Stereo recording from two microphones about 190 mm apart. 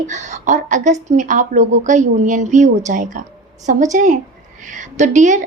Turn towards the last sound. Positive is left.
turn(degrees=-40)  # may be behind; listen again after turning